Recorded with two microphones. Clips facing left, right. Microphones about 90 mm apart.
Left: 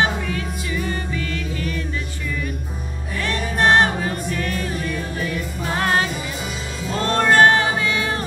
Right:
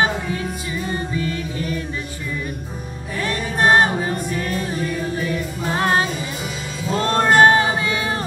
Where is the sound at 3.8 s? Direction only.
30° right (ahead or behind).